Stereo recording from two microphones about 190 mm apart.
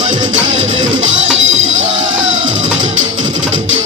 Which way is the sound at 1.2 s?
85° right.